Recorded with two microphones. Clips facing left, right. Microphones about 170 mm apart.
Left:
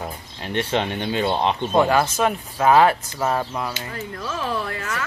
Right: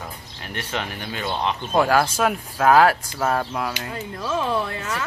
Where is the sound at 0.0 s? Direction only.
25° left (ahead or behind).